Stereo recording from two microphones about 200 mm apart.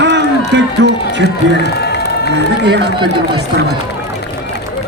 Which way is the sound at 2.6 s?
55° right (ahead or behind).